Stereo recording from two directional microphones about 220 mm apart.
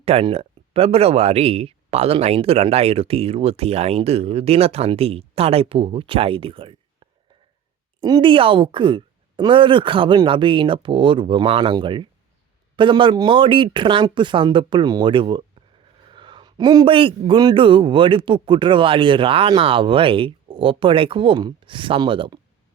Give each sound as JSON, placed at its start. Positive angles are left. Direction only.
{"t": 0.0, "sound": "speech", "side_deg": -25}
{"t": 8.0, "sound": "speech", "side_deg": -20}